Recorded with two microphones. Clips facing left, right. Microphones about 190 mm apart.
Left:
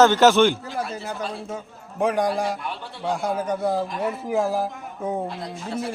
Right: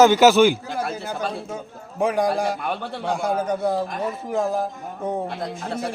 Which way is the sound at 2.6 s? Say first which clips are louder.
Right 6 dB; 60° right (ahead or behind).